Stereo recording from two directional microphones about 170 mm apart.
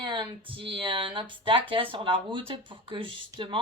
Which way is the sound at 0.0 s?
30° right (ahead or behind).